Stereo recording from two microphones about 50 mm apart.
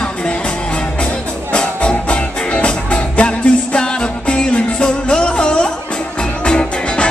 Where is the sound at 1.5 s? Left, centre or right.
Centre.